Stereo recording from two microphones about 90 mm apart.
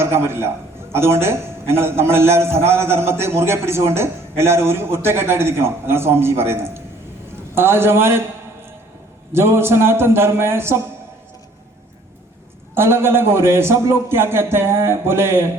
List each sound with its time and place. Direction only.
0.0 s a man's voice: 30° right (ahead or behind)
9.3 s a man's voice: 25° right (ahead or behind)
12.7 s a man's voice: 30° right (ahead or behind)